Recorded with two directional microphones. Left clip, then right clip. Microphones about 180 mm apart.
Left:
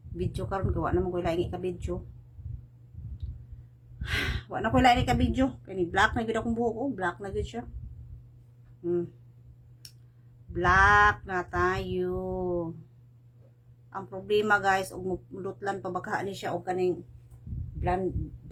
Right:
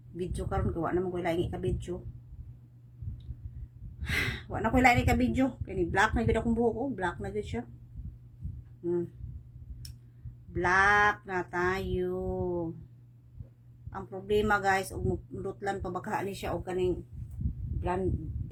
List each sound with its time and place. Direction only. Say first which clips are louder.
0.3 s a woman's voice: left 2 dB; 15° left (ahead or behind)
4.0 s a woman's voice: even; 10° left (ahead or behind)
8.8 s speech: left 2 dB; 15° left (ahead or behind)
10.5 s a woman's voice: left 3 dB; 15° left (ahead or behind)
13.9 s a woman's voice: left 2 dB; 15° left (ahead or behind)